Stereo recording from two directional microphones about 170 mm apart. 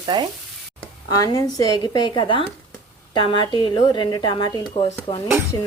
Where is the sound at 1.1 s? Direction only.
20° left (ahead or behind).